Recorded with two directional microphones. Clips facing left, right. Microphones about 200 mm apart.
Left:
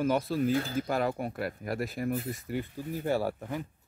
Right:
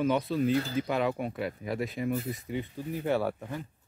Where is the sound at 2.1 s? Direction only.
50° left (ahead or behind).